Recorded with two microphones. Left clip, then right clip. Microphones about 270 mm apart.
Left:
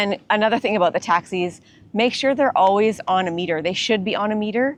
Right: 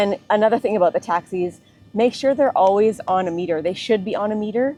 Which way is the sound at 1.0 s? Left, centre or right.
Centre.